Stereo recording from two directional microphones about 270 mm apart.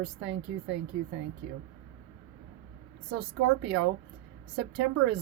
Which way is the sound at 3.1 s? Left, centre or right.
Right.